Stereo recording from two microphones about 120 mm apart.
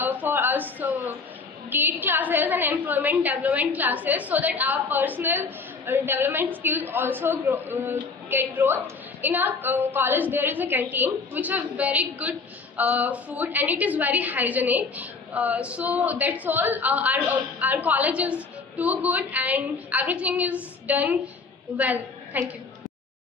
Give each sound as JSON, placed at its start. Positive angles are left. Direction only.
{"t": 0.0, "sound": "a woman's voice", "side_deg": -15}